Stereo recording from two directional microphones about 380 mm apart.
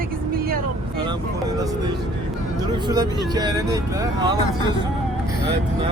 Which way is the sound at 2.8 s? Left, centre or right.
Centre.